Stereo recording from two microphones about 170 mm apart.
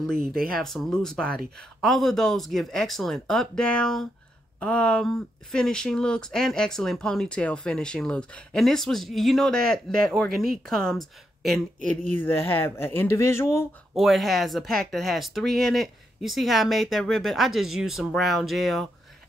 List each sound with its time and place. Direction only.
0.2 s speech: 60° right (ahead or behind)
0.6 s speech: centre (ahead or behind)
10.3 s speech: 60° right (ahead or behind)
10.6 s speech: 5° left (ahead or behind)
11.8 s speech: 45° right (ahead or behind)
12.2 s speech: 10° left (ahead or behind)
13.9 s speech: centre (ahead or behind)